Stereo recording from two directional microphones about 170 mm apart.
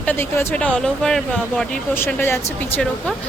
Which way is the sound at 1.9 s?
15° left (ahead or behind).